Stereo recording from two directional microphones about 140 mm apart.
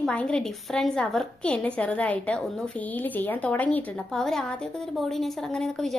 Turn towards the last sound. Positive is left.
turn(degrees=5)  # may be behind; listen again after turning